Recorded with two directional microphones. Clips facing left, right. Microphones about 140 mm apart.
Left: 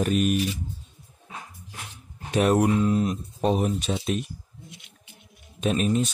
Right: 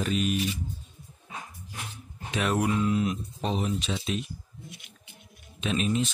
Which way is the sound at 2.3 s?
45° left (ahead or behind).